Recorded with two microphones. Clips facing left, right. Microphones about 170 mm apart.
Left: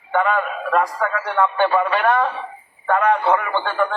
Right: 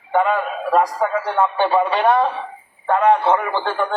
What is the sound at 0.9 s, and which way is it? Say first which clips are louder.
A man's voice: right 2 dB; 30° right (ahead or behind).